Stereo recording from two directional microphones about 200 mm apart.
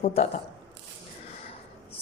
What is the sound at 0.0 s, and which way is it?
Speech, 30° left (ahead or behind).